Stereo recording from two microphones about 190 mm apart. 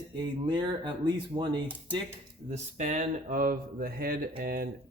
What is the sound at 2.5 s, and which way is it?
A man's voice, 40° right (ahead or behind).